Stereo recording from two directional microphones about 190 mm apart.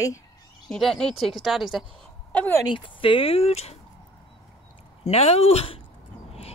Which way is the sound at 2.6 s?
25° left (ahead or behind).